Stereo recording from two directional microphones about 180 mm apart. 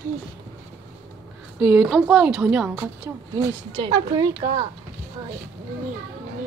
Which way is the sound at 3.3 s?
25° right (ahead or behind).